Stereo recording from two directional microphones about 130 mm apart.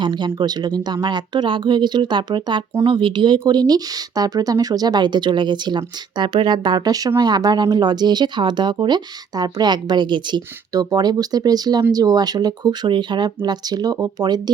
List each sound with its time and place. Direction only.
0.0 s speech: 35° right (ahead or behind)